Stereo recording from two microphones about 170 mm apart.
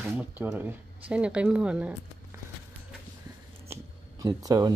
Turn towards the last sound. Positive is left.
turn(degrees=-25)  # may be behind; listen again after turning